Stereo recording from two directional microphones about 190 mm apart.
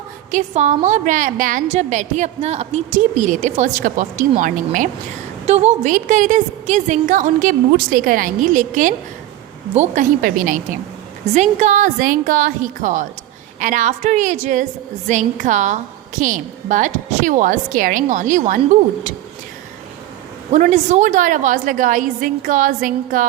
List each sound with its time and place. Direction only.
0.3 s a woman's voice: 40° right (ahead or behind)
20.5 s a woman's voice: 40° right (ahead or behind)